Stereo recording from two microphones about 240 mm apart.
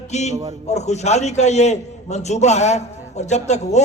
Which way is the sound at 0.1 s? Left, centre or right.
Left.